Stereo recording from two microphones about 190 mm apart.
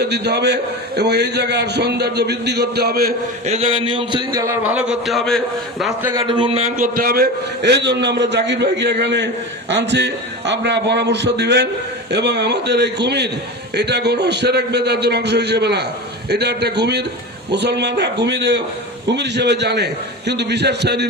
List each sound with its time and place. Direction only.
0.0 s a man's voice: 60° right (ahead or behind)
3.4 s a man's voice: 35° right (ahead or behind); by 5.4 s centre (ahead or behind)
5.8 s a man's voice: 10° right (ahead or behind)
6.1 s a man's voice: 25° right (ahead or behind); by 21.1 s 60° right (ahead or behind)